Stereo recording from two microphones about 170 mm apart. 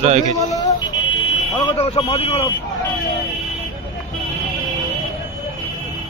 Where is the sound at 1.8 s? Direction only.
30° left (ahead or behind).